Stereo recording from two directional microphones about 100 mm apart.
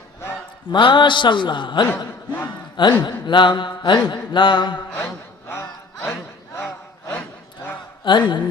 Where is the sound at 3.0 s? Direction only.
50° left (ahead or behind).